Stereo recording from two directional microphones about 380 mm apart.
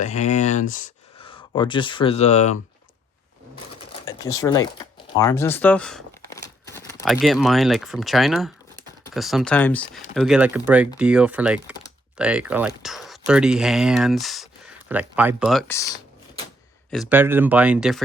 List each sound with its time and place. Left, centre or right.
0.0 s speech: centre
4.0 s speech: centre
16.9 s speech: centre